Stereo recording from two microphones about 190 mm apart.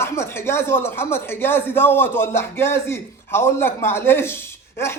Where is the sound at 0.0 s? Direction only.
15° left (ahead or behind).